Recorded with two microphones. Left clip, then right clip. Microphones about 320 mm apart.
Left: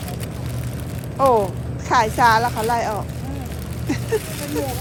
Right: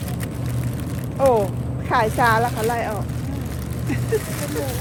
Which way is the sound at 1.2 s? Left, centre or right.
Centre.